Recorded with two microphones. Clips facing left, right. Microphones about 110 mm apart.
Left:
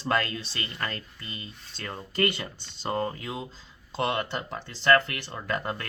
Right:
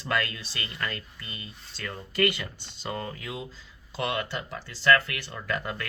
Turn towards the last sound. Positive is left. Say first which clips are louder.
# left 1 dB
turn(degrees=35)  # may be behind; listen again after turning